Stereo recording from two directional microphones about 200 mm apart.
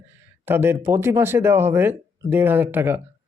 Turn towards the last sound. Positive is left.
turn(degrees=-10)  # may be behind; listen again after turning